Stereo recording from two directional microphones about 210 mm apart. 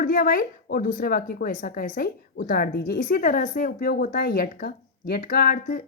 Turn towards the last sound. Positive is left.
turn(degrees=40)  # may be behind; listen again after turning